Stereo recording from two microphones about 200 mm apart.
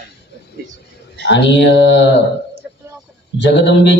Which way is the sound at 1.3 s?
60° left (ahead or behind).